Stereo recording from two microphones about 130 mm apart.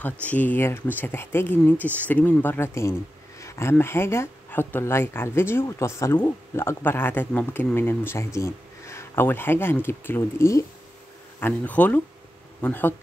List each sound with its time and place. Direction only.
0.0 s speech: 10° left (ahead or behind)